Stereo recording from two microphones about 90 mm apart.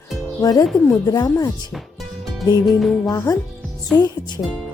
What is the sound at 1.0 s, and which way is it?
Speech, 40° left (ahead or behind).